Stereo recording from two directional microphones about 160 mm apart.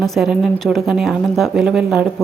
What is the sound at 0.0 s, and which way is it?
A woman's voice, centre (ahead or behind).